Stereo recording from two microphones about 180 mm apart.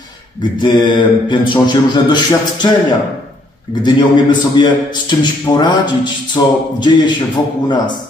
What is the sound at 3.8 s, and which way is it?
A man's voice, 25° left (ahead or behind).